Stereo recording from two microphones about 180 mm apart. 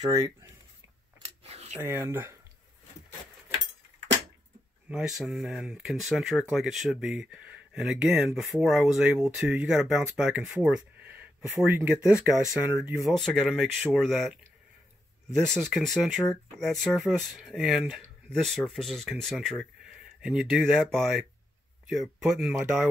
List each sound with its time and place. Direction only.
0.1 s speech: 20° right (ahead or behind)
1.2 s a sound: 35° right (ahead or behind)
1.8 s speech: 15° right (ahead or behind)
4.8 s speech: 5° right (ahead or behind)
15.4 s speech: 5° left (ahead or behind)